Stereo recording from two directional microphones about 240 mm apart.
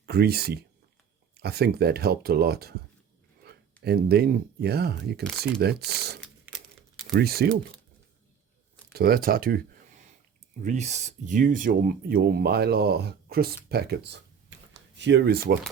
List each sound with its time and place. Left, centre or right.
0.0 s speech: right
3.8 s speech: right
8.9 s speech: right
10.6 s speech: right